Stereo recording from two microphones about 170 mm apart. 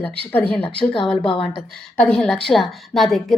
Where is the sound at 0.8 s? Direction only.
30° left (ahead or behind).